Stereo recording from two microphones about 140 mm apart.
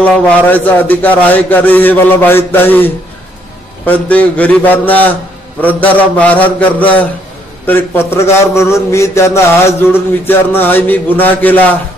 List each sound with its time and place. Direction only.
0.0 s mantra: 10° left (ahead or behind)